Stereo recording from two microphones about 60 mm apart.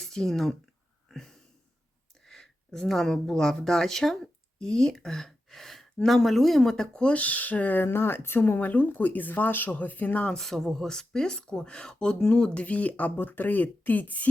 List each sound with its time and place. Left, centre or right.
0.0 s speech: centre
1.1 s a sound: centre
2.2 s speech: centre; by 10.2 s left
10.2 s speech: centre; by 14.3 s left